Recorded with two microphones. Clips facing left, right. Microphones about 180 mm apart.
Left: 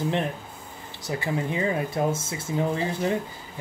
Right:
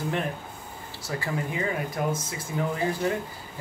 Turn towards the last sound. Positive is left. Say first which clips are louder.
# left 1 dB
turn(degrees=25)  # may be behind; listen again after turning